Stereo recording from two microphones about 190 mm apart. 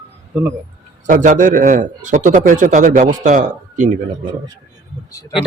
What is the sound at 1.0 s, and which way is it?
A man's voice, 40° right (ahead or behind).